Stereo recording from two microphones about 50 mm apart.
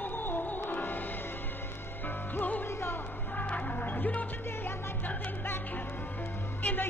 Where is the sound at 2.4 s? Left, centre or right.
Left.